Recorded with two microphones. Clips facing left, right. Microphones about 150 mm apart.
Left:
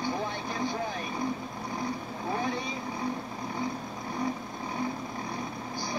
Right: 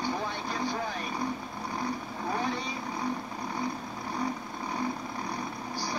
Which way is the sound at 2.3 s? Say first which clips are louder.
Left 1 dB; 20° left (ahead or behind).